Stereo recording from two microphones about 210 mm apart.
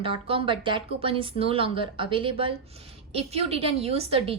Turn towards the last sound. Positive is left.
turn(degrees=-25)  # may be behind; listen again after turning